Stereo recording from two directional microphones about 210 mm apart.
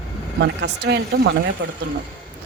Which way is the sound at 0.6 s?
55° right (ahead or behind).